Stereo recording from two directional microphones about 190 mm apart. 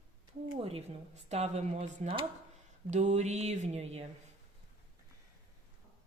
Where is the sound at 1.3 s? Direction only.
35° right (ahead or behind).